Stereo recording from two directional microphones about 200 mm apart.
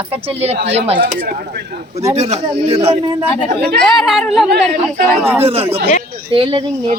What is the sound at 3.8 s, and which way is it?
A woman's voice, centre (ahead or behind).